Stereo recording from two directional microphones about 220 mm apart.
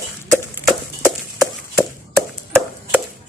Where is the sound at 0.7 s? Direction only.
Centre (ahead or behind).